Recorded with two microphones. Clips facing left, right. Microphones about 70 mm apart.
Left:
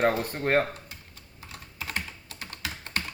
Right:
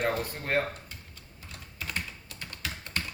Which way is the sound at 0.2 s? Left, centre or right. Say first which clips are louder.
Left 5 dB; left.